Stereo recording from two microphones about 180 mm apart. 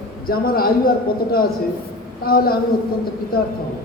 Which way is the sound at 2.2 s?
55° left (ahead or behind).